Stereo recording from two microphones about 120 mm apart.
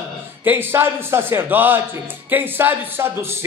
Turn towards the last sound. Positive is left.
turn(degrees=-20)  # may be behind; listen again after turning